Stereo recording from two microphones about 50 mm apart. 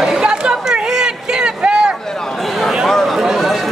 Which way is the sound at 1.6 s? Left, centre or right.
Centre.